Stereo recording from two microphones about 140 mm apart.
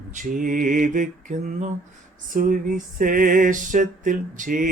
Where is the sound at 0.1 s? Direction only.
70° right (ahead or behind).